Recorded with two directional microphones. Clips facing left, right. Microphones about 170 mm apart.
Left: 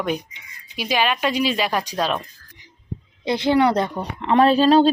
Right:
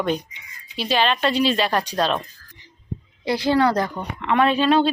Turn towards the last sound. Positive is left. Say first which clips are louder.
# left 4 dB
turn(degrees=35)  # may be behind; listen again after turning